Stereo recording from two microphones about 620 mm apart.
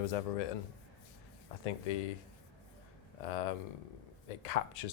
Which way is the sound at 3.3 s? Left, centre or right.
Left.